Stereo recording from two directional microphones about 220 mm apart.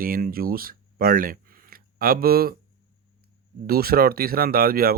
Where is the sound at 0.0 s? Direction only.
40° right (ahead or behind).